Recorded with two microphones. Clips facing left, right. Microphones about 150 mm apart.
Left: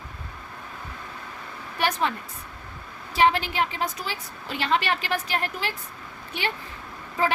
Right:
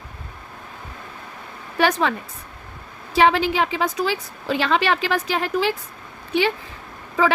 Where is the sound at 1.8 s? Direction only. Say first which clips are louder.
Right 6 dB; 90° right.